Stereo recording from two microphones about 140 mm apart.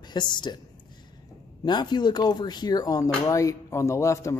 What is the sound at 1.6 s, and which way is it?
A man's voice, 30° left (ahead or behind).